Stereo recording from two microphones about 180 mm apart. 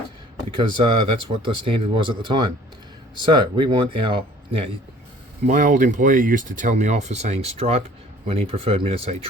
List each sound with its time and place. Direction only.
0.5 s speech: 25° right (ahead or behind)
5.5 s speech: 45° right (ahead or behind)